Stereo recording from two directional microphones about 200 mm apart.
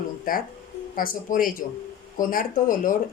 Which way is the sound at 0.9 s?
45° left (ahead or behind).